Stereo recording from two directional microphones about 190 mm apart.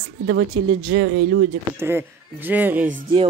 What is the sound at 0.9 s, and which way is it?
Speech, 65° right (ahead or behind).